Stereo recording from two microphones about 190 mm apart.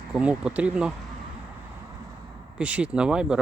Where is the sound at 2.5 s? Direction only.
5° right (ahead or behind).